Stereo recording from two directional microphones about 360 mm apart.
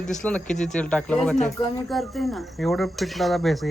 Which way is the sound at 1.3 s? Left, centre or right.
Centre.